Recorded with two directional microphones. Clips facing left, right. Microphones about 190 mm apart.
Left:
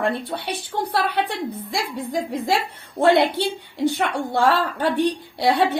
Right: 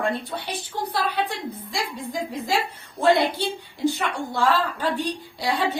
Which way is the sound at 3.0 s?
65° left (ahead or behind).